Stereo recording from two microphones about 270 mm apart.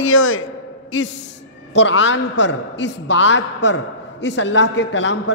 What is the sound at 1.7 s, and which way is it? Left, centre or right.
A man's voice, left.